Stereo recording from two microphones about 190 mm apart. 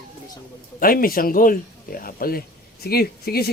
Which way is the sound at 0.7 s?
50° left (ahead or behind).